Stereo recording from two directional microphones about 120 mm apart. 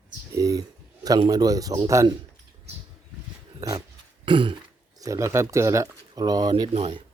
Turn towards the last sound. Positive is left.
turn(degrees=-55)  # may be behind; listen again after turning